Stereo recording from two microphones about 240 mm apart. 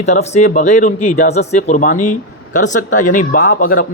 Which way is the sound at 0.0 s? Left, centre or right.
Left.